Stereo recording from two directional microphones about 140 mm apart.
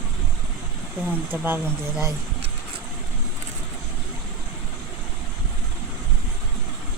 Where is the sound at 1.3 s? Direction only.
15° right (ahead or behind).